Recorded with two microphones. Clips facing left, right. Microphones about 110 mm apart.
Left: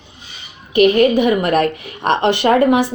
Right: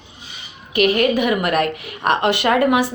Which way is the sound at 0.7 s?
25° left (ahead or behind).